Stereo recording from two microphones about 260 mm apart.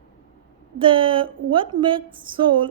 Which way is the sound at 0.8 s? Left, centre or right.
Centre.